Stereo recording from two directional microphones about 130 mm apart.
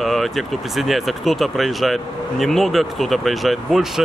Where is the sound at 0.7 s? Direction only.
Centre (ahead or behind).